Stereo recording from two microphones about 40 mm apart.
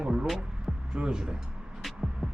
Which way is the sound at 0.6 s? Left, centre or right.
Centre.